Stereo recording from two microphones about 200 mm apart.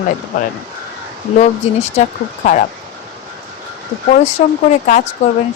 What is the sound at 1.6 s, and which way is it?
Speech, 35° left (ahead or behind).